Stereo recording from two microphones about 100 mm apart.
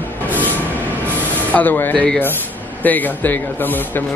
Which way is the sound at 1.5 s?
20° left (ahead or behind).